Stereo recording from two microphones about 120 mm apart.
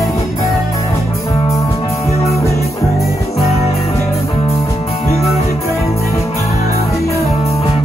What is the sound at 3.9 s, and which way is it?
Music, 25° left (ahead or behind).